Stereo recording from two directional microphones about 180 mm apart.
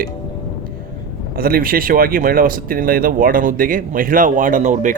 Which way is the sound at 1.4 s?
55° right (ahead or behind).